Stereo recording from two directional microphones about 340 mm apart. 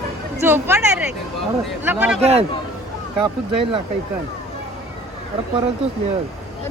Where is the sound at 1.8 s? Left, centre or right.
Centre.